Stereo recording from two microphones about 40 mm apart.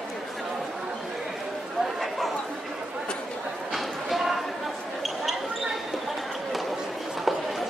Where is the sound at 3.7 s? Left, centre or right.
Centre.